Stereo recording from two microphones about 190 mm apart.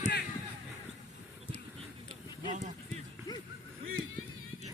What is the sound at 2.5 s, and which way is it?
Speech, 35° right (ahead or behind).